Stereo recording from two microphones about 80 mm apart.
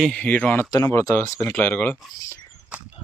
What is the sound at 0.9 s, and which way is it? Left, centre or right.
Speech, left.